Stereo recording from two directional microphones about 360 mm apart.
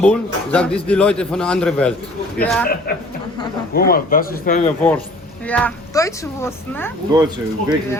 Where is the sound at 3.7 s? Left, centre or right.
Left.